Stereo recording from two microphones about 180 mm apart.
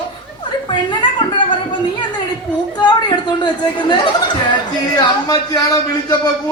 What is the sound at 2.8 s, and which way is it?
Speech, 25° left (ahead or behind).